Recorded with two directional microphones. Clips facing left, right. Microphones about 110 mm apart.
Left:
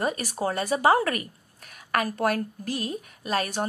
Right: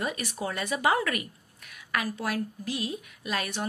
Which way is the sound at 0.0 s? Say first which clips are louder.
Left 5 dB; 40° left (ahead or behind).